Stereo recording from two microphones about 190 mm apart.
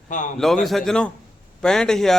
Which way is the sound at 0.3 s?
Centre (ahead or behind).